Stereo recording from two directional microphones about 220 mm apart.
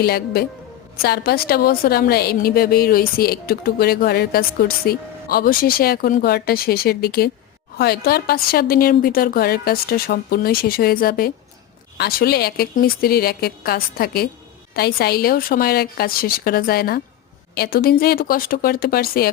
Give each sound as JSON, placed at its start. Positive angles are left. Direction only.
{"t": 0.0, "sound": "a woman's voice", "side_deg": 45}